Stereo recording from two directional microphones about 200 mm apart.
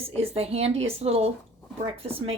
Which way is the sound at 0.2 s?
30° right (ahead or behind).